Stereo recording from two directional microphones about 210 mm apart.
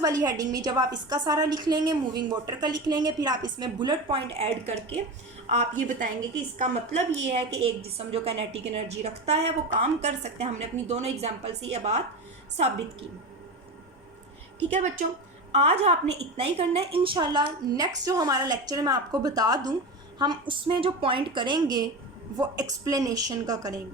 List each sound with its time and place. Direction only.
0.0 s a woman's voice: 15° right (ahead or behind)
14.7 s a woman's voice: 35° right (ahead or behind); by 23.8 s 15° right (ahead or behind)